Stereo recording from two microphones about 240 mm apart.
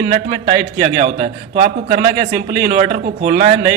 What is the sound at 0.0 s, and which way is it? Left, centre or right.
A man's voice, right.